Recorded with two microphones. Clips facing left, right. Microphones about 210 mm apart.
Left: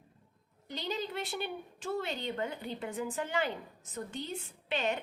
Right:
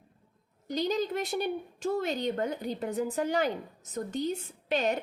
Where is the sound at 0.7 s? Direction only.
40° right (ahead or behind).